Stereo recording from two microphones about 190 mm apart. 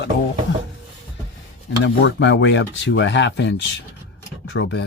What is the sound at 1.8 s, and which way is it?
Speech, 65° left (ahead or behind).